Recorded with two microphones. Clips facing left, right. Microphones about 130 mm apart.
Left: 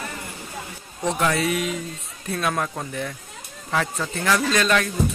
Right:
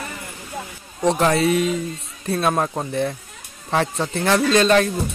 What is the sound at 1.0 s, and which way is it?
Speech, 35° right (ahead or behind).